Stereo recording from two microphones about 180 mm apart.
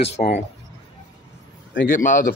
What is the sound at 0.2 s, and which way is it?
Speech, 50° left (ahead or behind).